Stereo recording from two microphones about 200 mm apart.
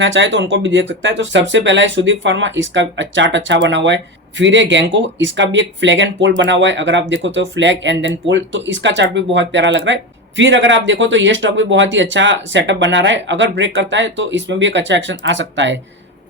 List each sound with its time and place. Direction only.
0.0 s speech: 65° right (ahead or behind)